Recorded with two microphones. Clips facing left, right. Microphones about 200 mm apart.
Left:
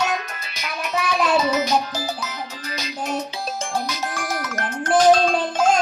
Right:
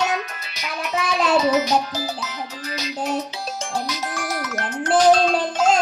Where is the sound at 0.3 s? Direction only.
50° left (ahead or behind).